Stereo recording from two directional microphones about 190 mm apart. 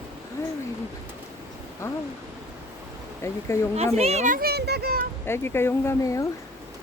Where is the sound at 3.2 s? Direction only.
15° left (ahead or behind).